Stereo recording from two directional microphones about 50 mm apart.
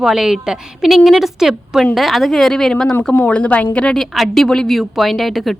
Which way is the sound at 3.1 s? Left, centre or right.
Left.